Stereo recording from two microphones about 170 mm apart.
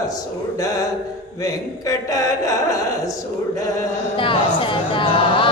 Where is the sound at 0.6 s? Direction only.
20° left (ahead or behind).